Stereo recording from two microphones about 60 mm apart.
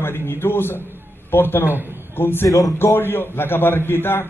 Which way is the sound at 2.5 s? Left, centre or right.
Left.